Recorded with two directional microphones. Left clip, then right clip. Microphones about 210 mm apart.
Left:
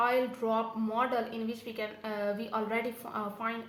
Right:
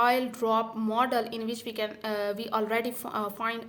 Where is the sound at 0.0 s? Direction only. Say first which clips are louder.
Right 4 dB; 40° right (ahead or behind).